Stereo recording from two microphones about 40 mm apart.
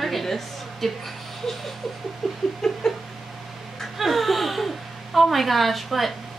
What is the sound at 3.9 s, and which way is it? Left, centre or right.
A woman's voice, centre.